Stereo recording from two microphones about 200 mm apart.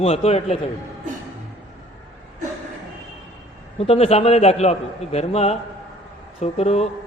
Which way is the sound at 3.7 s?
30° left (ahead or behind).